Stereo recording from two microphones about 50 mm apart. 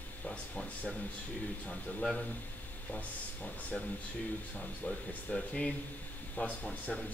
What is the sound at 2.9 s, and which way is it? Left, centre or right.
Speech, left.